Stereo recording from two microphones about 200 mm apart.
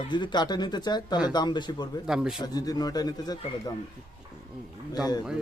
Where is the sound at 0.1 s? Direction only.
20° left (ahead or behind).